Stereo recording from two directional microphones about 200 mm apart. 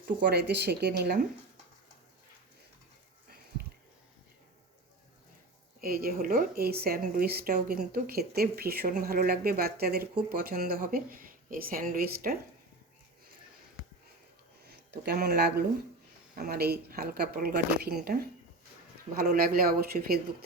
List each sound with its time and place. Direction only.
0.0 s speech: 55° right (ahead or behind)
5.8 s a woman's voice: 45° right (ahead or behind)
14.7 s a woman's voice: 55° right (ahead or behind)